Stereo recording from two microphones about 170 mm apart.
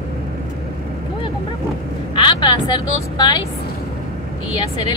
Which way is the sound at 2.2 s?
25° left (ahead or behind).